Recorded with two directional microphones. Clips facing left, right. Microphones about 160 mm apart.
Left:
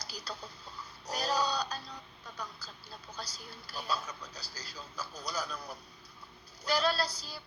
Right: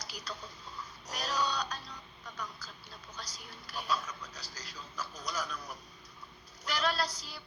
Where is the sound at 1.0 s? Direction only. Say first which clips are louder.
Left 3 dB; 30° left (ahead or behind).